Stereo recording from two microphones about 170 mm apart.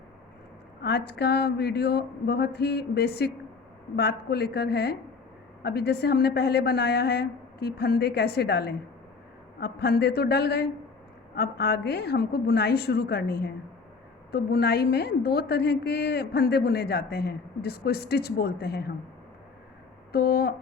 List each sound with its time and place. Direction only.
0.8 s a woman's voice: 70° left (ahead or behind)
20.1 s speech: 65° left (ahead or behind)